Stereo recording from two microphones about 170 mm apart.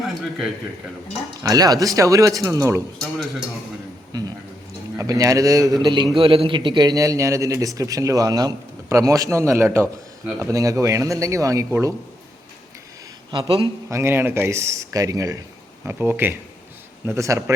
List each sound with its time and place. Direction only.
0.1 s a man's voice: centre (ahead or behind)
1.5 s a man's voice: 20° right (ahead or behind)
4.9 s a man's voice: 20° right (ahead or behind)
13.3 s a man's voice: 30° right (ahead or behind)
13.9 s speech: 15° right (ahead or behind)